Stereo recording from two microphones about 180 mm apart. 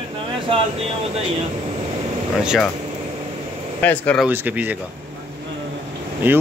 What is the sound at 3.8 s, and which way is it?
Speech, 10° left (ahead or behind).